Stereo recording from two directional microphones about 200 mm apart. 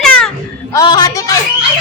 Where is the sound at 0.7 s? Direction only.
20° left (ahead or behind).